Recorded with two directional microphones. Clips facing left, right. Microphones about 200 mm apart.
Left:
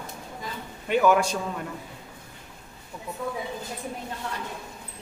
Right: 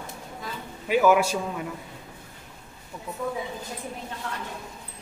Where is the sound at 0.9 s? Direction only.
5° right (ahead or behind).